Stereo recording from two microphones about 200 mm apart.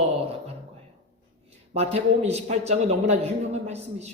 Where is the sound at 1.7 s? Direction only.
30° right (ahead or behind).